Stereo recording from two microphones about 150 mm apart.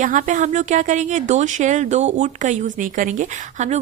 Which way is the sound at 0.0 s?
55° right (ahead or behind).